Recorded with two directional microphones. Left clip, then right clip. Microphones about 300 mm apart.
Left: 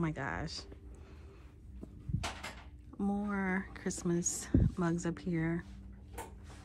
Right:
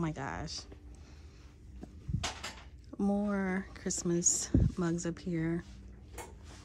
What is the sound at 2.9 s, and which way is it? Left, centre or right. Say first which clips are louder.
Speech: right 3 dB; centre.